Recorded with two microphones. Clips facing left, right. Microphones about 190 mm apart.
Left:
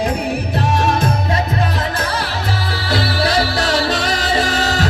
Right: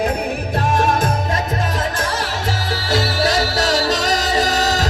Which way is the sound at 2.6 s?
45° right (ahead or behind).